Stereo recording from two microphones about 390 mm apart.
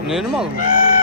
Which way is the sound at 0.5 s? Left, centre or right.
Left.